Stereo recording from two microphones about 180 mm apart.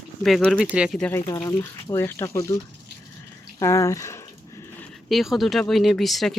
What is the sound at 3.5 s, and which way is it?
Speech, 15° left (ahead or behind).